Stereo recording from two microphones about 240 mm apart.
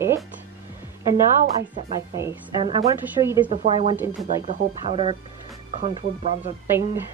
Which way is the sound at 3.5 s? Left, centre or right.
Right.